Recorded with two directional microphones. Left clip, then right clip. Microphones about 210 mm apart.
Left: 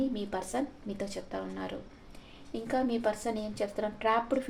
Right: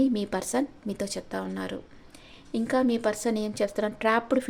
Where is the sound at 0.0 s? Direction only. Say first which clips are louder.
Right 7 dB; 55° right (ahead or behind).